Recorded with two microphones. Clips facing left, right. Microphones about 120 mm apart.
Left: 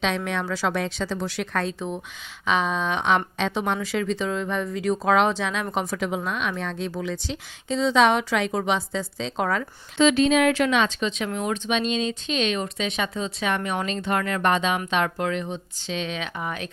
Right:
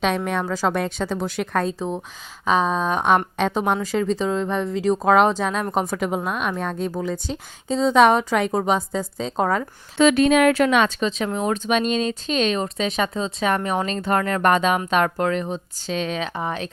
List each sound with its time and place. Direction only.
0.3 s a woman's voice: 45° right (ahead or behind)
10.0 s speech: 55° right (ahead or behind); by 16.6 s 35° right (ahead or behind)